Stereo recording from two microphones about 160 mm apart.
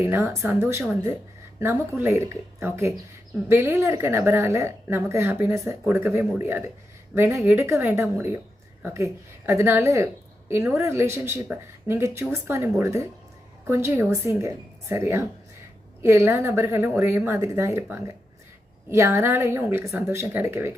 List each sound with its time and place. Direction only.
0.0 s a woman's voice: 15° right (ahead or behind)